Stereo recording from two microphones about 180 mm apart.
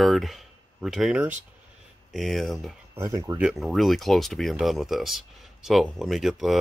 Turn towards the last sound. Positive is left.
turn(degrees=0)  # may be behind; listen again after turning